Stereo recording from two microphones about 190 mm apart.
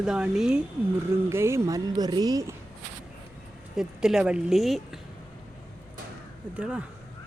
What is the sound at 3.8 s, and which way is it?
Speech, 5° right (ahead or behind).